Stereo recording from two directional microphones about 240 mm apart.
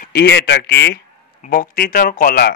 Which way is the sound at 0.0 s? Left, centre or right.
Left.